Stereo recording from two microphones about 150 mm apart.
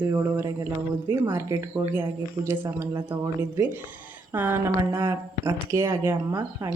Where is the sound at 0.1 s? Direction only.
20° right (ahead or behind).